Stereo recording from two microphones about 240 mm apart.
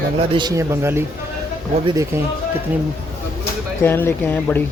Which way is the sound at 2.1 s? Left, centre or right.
Centre.